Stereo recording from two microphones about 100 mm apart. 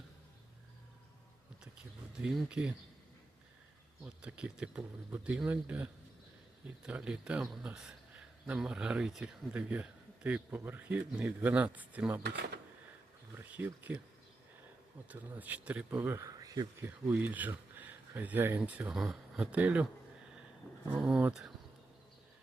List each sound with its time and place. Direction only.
2.2 s speech: 10° right (ahead or behind)
4.0 s speech: 10° right (ahead or behind)
15.1 s speech: 15° right (ahead or behind)
16.2 s speech: 35° right (ahead or behind)
16.8 s speech: 15° right (ahead or behind)